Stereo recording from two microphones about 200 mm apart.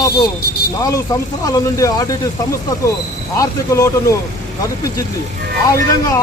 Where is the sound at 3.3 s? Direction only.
15° left (ahead or behind).